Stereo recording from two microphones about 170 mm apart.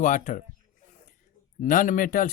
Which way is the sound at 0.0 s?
50° left (ahead or behind).